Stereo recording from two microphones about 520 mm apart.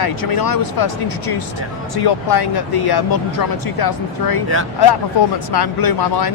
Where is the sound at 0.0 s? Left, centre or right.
Left.